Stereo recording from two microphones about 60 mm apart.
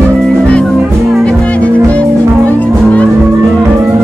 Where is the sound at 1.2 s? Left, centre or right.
Centre.